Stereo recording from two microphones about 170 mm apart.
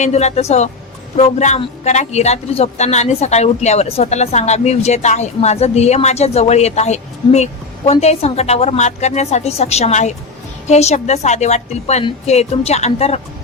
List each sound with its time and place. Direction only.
0.0 s a man's voice: 40° left (ahead or behind)